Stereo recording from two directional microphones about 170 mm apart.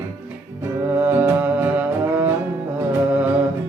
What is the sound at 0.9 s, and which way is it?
Music, 10° right (ahead or behind).